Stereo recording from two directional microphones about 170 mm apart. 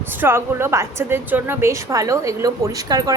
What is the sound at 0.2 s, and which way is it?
A woman's voice, 15° right (ahead or behind).